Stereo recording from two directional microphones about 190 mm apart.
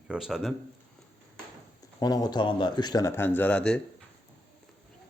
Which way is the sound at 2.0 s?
20° left (ahead or behind).